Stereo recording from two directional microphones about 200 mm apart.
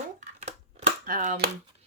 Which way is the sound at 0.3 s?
35° right (ahead or behind).